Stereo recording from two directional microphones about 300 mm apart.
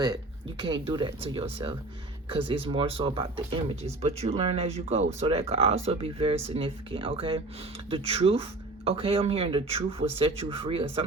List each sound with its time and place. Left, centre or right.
0.6 s speech: centre